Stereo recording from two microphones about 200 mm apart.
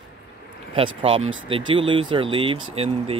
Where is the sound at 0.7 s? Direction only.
25° right (ahead or behind).